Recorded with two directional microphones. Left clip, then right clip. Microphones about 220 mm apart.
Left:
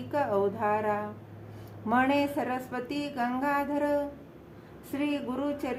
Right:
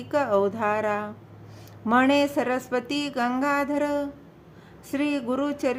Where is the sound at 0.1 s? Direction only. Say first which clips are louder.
Right 5 dB; 45° right (ahead or behind).